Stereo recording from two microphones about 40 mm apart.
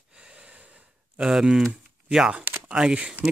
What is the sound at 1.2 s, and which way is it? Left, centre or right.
Speech, centre.